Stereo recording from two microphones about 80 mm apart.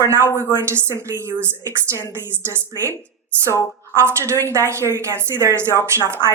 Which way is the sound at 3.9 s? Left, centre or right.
Right.